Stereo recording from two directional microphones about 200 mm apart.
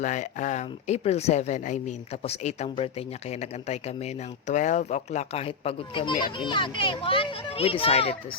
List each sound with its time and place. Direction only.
0.0 s speech: 40° left (ahead or behind)